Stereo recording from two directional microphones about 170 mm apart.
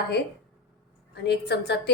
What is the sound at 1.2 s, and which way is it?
Speech, 75° left (ahead or behind).